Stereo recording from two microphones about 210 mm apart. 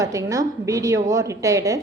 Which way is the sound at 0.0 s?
15° right (ahead or behind).